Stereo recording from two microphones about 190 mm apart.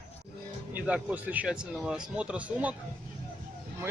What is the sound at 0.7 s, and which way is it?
Speech, 5° right (ahead or behind).